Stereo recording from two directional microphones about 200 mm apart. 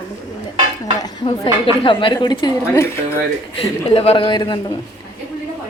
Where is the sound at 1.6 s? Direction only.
25° left (ahead or behind).